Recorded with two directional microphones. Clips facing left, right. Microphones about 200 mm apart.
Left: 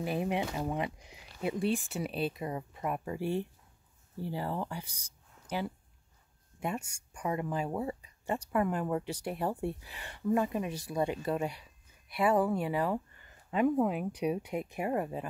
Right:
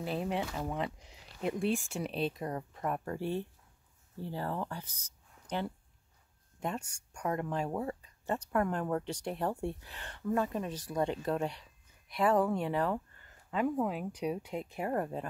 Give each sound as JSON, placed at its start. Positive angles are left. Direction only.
{"t": 0.0, "sound": "speech", "side_deg": 15}